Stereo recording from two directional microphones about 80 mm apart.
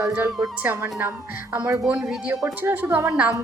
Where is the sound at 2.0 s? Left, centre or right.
Centre.